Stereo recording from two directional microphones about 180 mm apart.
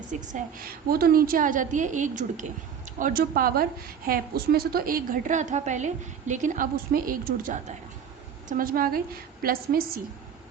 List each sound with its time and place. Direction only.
0.9 s a woman's voice: 55° right (ahead or behind)